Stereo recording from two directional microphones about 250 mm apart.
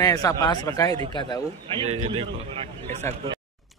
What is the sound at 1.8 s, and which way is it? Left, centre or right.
Speech, right.